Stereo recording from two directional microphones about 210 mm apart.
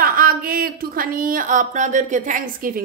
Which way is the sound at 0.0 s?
45° right (ahead or behind).